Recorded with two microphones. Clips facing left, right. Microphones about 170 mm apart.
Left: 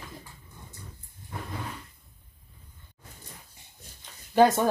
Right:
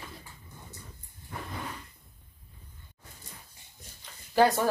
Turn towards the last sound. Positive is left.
turn(degrees=20)  # may be behind; listen again after turning